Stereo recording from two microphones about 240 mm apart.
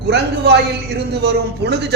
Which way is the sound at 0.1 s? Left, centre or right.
Right.